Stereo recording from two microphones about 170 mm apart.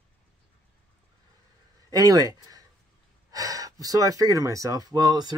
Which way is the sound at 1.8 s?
20° right (ahead or behind).